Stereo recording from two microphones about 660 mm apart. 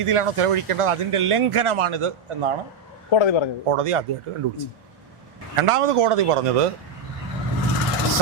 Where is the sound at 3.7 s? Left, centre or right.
Right.